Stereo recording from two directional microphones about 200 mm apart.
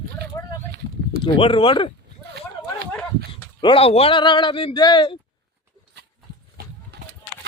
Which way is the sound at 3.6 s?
25° left (ahead or behind).